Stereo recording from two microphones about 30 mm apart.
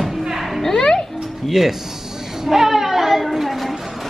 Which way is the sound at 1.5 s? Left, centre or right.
Centre.